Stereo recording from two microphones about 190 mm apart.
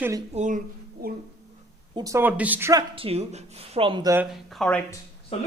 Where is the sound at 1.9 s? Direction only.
20° right (ahead or behind).